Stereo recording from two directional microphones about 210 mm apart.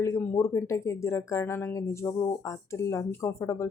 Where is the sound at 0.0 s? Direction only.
10° left (ahead or behind).